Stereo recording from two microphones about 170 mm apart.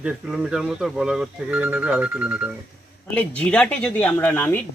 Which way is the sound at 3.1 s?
10° left (ahead or behind).